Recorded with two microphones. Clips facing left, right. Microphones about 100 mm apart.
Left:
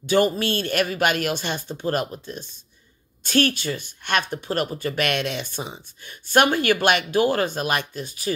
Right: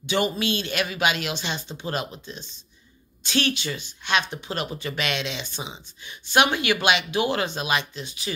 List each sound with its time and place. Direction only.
0.0 s speech: 45° left (ahead or behind)